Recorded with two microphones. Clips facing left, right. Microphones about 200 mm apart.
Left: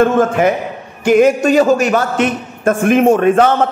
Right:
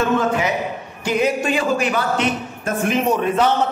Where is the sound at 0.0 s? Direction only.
50° left (ahead or behind).